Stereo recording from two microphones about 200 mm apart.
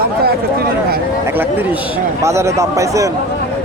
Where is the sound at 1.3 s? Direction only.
10° right (ahead or behind).